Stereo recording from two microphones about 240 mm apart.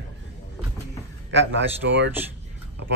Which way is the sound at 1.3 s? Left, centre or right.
Right.